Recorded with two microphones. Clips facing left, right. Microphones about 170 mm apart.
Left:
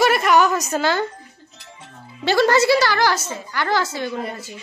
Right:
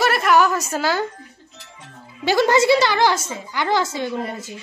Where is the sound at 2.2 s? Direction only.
15° right (ahead or behind).